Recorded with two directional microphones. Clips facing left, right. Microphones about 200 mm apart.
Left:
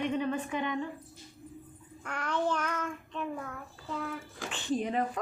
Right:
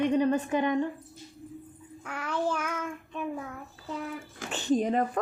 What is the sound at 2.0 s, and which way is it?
Child singing, 5° right (ahead or behind).